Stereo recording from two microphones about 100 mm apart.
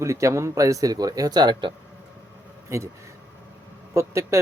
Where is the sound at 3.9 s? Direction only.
30° right (ahead or behind).